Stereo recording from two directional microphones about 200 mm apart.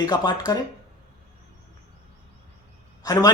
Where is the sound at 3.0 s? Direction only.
20° left (ahead or behind).